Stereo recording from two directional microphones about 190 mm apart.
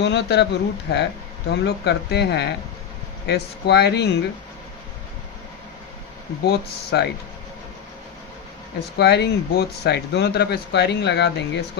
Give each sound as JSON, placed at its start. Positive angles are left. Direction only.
{"t": 0.0, "sound": "speech", "side_deg": 65}
{"t": 6.4, "sound": "speech", "side_deg": 60}
{"t": 9.0, "sound": "speech", "side_deg": 60}